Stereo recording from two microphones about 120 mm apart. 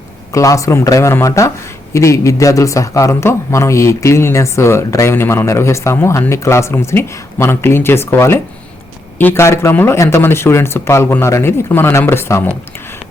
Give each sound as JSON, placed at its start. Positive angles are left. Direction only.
{"t": 0.3, "sound": "speech", "side_deg": 25}